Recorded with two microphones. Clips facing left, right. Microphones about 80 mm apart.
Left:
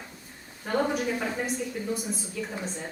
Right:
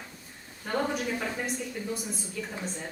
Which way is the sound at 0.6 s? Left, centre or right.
Centre.